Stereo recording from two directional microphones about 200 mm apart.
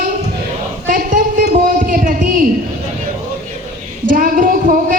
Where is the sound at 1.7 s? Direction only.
40° right (ahead or behind).